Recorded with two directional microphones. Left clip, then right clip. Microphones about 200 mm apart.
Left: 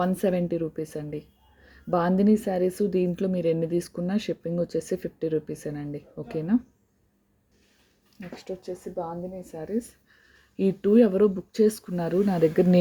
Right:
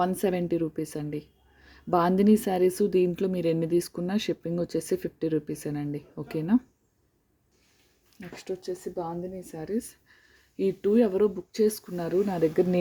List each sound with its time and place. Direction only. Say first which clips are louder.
0.0 s a woman's voice: left 1 dB; 5° right (ahead or behind)
8.4 s speech: right 2 dB; 20° right (ahead or behind)
10.6 s speech: left 3 dB; 5° left (ahead or behind)